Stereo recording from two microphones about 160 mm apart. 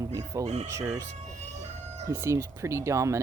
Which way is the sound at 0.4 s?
45° right (ahead or behind).